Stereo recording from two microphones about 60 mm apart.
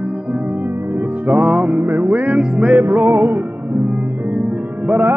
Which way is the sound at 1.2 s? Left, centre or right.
Right.